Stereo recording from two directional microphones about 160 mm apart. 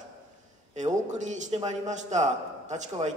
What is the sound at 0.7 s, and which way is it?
A man's voice, 50° right (ahead or behind).